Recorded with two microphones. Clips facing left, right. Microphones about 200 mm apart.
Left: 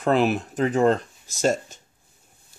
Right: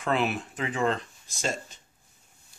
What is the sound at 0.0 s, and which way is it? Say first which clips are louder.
Speech: left 7 dB; 40° left (ahead or behind).